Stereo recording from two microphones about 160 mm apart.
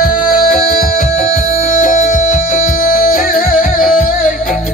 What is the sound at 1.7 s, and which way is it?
Music, 55° left (ahead or behind).